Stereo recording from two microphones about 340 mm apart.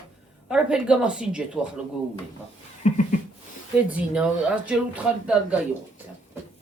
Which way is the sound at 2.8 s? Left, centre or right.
Centre.